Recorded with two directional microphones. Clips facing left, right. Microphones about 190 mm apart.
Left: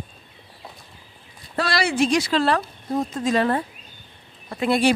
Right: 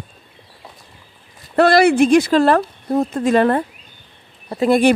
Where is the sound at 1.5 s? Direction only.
60° right (ahead or behind).